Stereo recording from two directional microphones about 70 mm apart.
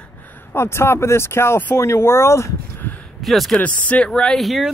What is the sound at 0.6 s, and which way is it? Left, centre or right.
Speech, left.